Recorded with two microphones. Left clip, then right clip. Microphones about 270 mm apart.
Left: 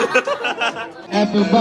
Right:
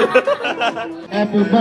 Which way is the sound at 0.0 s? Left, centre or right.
Centre.